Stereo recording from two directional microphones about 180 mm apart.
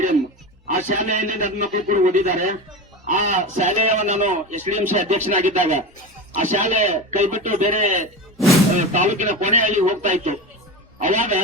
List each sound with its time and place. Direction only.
0.7 s a man's voice: 45° right (ahead or behind)